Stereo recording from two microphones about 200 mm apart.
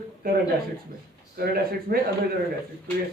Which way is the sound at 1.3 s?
50° right (ahead or behind).